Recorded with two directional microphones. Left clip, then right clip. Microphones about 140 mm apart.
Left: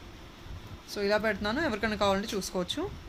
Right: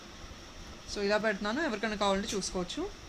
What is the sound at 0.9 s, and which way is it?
Speech, 15° left (ahead or behind).